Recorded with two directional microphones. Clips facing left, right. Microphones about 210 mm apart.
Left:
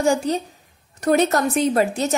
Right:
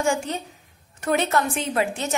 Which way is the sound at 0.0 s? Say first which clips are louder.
Left 5 dB; 35° left (ahead or behind).